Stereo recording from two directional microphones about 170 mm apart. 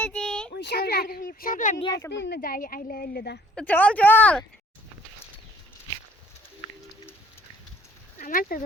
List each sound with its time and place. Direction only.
0.0 s a sound: 5° left (ahead or behind)
0.5 s speech: 70° left (ahead or behind); by 1.8 s 50° left (ahead or behind)
2.0 s a woman's voice: 15° left (ahead or behind)
2.4 s a woman's voice: 55° left (ahead or behind)
3.5 s a woman's voice: 10° left (ahead or behind)
8.2 s a woman's voice: 55° left (ahead or behind)